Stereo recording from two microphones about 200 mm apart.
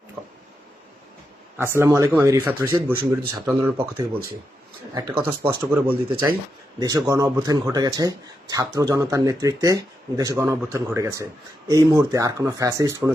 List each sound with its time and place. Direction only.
0.2 s a sound: 5° right (ahead or behind)
1.5 s speech: 10° right (ahead or behind)
4.9 s speech: 20° right (ahead or behind)
5.5 s speech: 10° right (ahead or behind)